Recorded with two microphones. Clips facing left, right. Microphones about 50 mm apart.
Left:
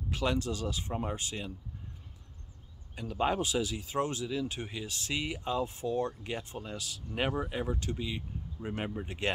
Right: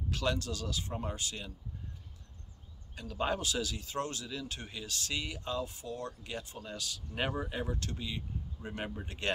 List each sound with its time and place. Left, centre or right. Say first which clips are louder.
0.1 s speech: left 3 dB; centre
3.0 s speech: left 4 dB; centre
5.7 s speech: left 8 dB; left
6.6 s speech: left 1 dB; centre